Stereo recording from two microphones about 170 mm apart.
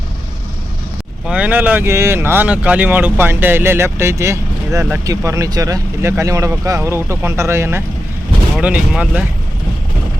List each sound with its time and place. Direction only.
1.3 s speech: 10° right (ahead or behind)